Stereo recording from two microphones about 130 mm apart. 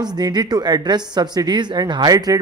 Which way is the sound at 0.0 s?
30° right (ahead or behind).